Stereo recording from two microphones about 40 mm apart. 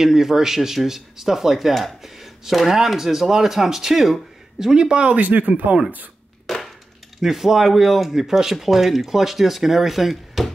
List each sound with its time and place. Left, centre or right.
0.0 s speech: centre
5.1 s speech: right
6.4 s a sound: centre
7.2 s speech: centre